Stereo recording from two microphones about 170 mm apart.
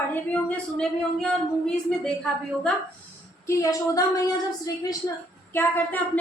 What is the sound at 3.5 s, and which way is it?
Speech, 20° left (ahead or behind).